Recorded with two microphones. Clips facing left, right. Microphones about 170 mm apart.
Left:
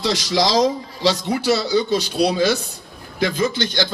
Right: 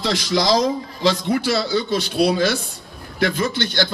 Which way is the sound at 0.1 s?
55° right (ahead or behind).